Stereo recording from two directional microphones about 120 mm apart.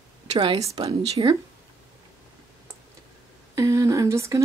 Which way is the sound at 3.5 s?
25° right (ahead or behind).